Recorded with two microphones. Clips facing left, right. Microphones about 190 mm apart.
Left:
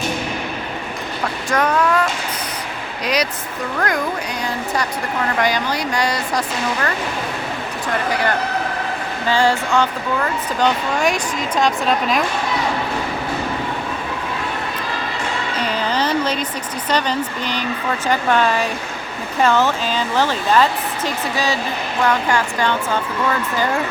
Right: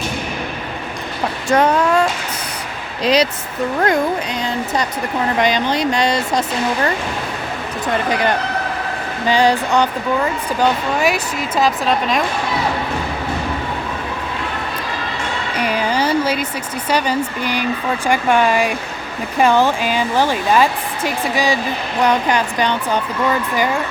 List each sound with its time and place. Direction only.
1.5 s speech: 25° right (ahead or behind)
5.4 s speech: 20° right (ahead or behind)
8.1 s speech: 20° right (ahead or behind)
10.6 s speech: 5° right (ahead or behind)
15.5 s a woman's voice: 10° right (ahead or behind)